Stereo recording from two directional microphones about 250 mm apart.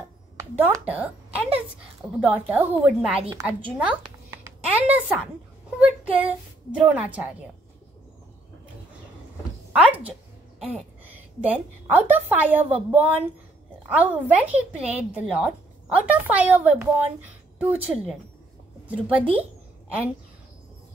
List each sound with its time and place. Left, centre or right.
0.6 s a woman's voice: centre
3.7 s a sound: centre
5.8 s a woman's voice: centre
9.7 s a woman's voice: centre